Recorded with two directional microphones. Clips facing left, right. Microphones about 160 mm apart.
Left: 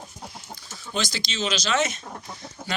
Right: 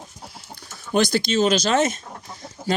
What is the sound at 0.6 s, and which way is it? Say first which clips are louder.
Speech: right 10 dB; 55° right (ahead or behind).